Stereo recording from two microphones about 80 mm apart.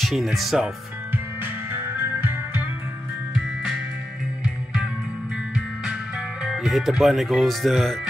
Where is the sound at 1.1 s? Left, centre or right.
Right.